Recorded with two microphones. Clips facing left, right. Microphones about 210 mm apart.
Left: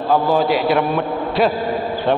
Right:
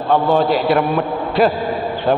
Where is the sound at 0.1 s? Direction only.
Centre (ahead or behind).